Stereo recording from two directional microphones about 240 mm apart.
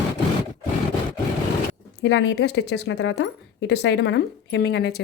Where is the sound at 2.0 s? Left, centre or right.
Left.